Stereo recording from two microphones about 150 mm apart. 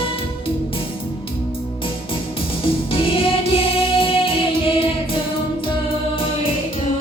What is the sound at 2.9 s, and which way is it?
Music, 35° left (ahead or behind).